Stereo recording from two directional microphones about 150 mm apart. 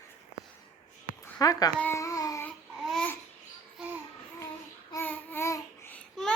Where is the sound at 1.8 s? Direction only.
15° left (ahead or behind).